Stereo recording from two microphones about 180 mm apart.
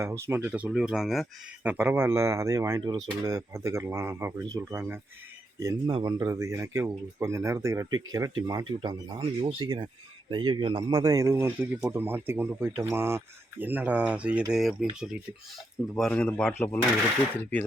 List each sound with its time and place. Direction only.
0.0 s speech: 15° right (ahead or behind)
16.0 s speech: 5° left (ahead or behind)